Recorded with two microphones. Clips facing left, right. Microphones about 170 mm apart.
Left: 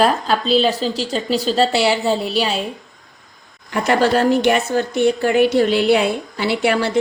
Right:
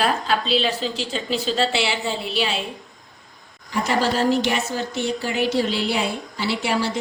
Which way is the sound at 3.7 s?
60° left (ahead or behind).